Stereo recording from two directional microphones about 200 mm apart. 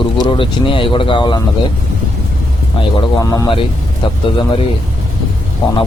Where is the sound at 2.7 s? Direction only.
20° left (ahead or behind).